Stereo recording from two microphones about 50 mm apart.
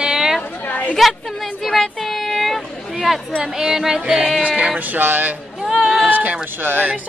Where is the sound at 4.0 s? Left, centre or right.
Centre.